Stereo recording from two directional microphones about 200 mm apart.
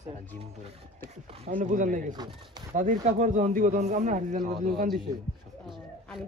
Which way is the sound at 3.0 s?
40° right (ahead or behind).